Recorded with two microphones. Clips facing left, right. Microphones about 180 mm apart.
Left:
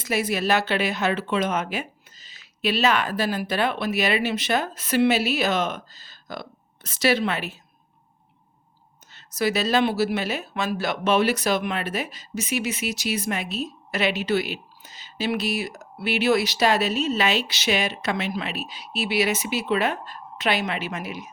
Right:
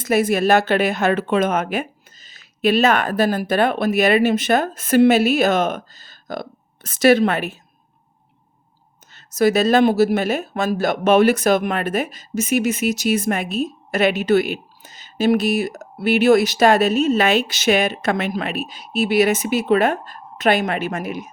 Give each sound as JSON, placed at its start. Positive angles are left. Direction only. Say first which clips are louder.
{"t": 0.0, "sound": "speech", "louder": "right 7 dB", "side_deg": -50}
{"t": 9.1, "sound": "speech", "louder": "right 8 dB", "side_deg": -45}